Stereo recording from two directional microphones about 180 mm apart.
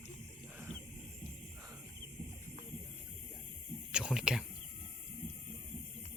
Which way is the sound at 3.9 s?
5° right (ahead or behind).